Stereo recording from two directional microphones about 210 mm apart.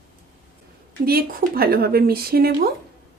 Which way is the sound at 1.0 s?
45° right (ahead or behind).